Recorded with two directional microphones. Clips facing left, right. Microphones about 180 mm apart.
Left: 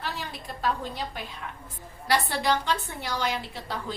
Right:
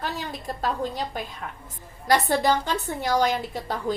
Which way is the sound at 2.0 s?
45° right (ahead or behind).